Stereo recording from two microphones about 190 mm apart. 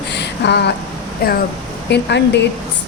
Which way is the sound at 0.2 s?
60° left (ahead or behind).